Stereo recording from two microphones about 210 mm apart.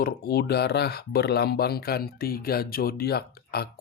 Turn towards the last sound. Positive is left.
turn(degrees=50)  # may be behind; listen again after turning